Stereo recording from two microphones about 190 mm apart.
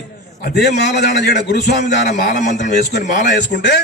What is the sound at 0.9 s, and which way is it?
A man's voice, 60° left (ahead or behind).